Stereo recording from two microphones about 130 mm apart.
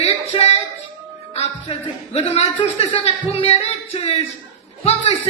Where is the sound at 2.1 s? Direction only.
50° left (ahead or behind).